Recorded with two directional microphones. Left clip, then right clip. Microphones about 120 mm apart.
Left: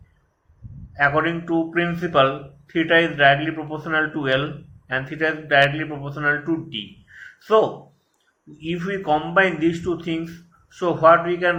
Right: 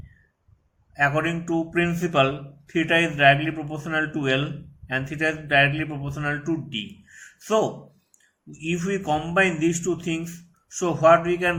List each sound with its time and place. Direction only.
0.9 s a man's voice: 30° right (ahead or behind)